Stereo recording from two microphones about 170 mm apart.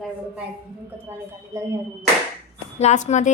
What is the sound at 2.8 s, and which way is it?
Speech, 40° left (ahead or behind).